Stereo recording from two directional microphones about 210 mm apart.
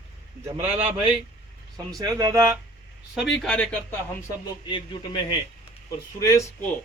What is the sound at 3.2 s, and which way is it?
Speech, centre (ahead or behind).